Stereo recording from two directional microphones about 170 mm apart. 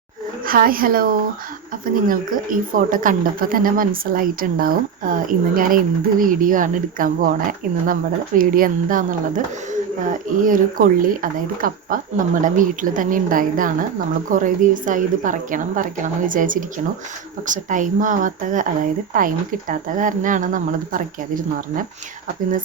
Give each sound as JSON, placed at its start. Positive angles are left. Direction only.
{"t": 0.4, "sound": "a woman's voice", "side_deg": -55}
{"t": 8.4, "sound": "speech", "side_deg": -55}